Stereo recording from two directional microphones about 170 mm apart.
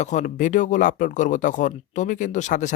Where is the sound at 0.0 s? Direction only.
45° left (ahead or behind).